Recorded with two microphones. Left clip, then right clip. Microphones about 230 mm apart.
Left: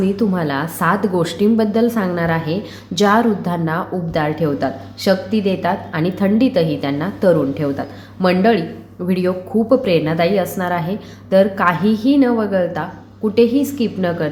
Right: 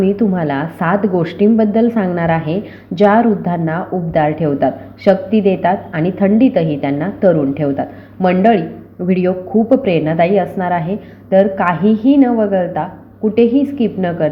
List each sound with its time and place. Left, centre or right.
0.0 s a woman's voice: centre